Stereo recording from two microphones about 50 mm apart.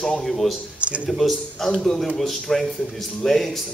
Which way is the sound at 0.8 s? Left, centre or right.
Right.